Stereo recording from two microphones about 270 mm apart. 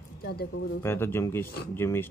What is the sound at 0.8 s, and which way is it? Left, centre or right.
Speech, centre.